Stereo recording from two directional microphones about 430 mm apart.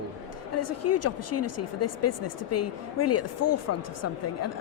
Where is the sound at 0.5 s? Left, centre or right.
Left.